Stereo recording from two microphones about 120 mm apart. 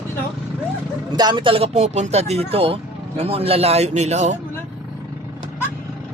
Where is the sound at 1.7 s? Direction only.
75° right (ahead or behind).